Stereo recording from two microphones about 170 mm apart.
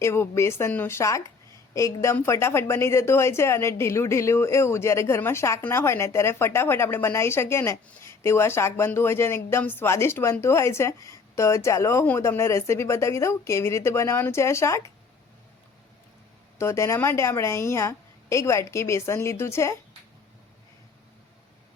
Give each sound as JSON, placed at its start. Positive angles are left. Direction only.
{"t": 0.0, "sound": "speech", "side_deg": 15}
{"t": 16.6, "sound": "speech", "side_deg": 15}